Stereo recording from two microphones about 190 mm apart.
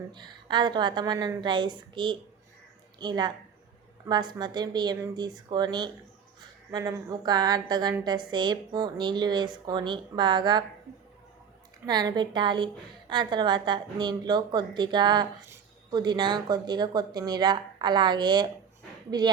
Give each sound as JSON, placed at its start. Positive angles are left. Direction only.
{"t": 0.1, "sound": "a woman's voice", "side_deg": -25}
{"t": 11.9, "sound": "a woman's voice", "side_deg": -20}